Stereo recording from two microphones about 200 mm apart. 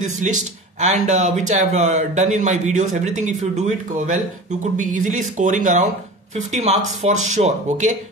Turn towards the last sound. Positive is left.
turn(degrees=-40)  # may be behind; listen again after turning